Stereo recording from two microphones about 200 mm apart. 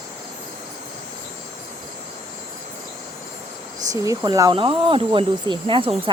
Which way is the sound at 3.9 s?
15° right (ahead or behind).